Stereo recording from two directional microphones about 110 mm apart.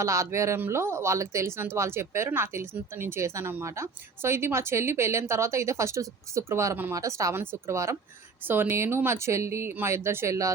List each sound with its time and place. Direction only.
0.0 s speech: 30° right (ahead or behind)